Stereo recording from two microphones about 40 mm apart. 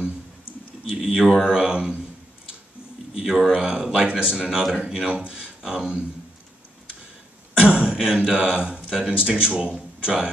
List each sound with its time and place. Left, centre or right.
1.0 s speech: centre
1.4 s a man's voice: right
3.2 s a man's voice: centre
7.5 s throat clearing: right
8.3 s a man's voice: right